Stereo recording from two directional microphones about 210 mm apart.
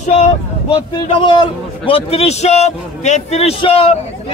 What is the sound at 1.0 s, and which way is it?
A man's voice, 25° left (ahead or behind).